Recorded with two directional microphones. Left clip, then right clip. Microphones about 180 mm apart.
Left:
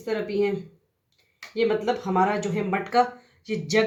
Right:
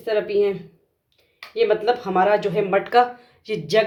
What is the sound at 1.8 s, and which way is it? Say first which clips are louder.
Speech: right 4 dB; 45° right (ahead or behind).